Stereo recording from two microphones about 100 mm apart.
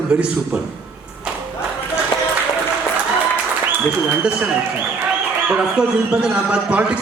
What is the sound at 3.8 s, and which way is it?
Speech, 10° right (ahead or behind).